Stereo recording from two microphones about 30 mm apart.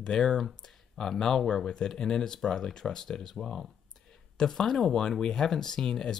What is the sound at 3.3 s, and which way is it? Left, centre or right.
Speech, centre.